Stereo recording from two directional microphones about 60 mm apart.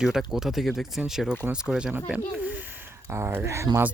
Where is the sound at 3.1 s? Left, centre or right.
Right.